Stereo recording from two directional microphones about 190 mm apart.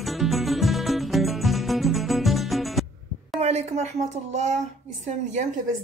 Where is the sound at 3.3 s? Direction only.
35° right (ahead or behind).